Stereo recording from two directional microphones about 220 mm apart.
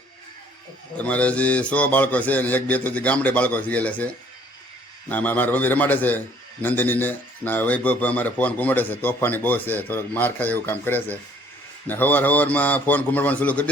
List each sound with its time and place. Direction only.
0.9 s a man's voice: 5° left (ahead or behind)